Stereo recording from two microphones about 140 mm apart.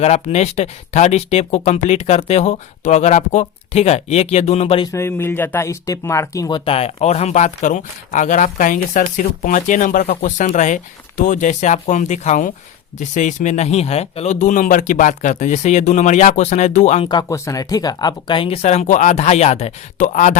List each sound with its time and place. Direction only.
0.0 s speech: 50° left (ahead or behind)
4.9 s speech: 20° left (ahead or behind)
6.7 s speech: 45° left (ahead or behind)
17.1 s speech: 25° left (ahead or behind); by 20.3 s 60° left (ahead or behind)